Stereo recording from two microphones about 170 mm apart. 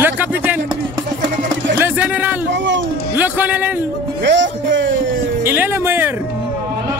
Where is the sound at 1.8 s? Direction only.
10° right (ahead or behind).